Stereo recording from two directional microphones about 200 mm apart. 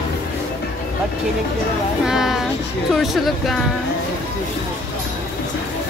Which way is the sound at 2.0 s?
Centre (ahead or behind).